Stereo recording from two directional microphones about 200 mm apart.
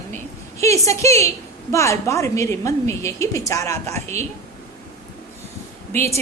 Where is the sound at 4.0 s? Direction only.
35° right (ahead or behind).